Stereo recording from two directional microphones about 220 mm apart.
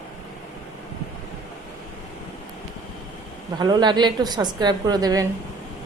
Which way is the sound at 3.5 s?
20° right (ahead or behind).